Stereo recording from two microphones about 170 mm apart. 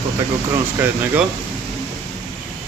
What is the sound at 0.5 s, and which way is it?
Speech, 10° right (ahead or behind).